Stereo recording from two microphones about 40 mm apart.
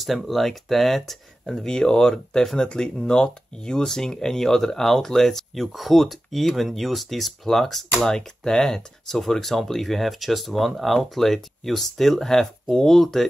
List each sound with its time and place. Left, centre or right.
0.0 s speech: centre
1.7 s speech: centre